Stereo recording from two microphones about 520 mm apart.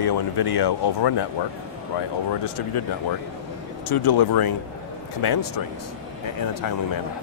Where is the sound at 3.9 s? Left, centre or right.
Left.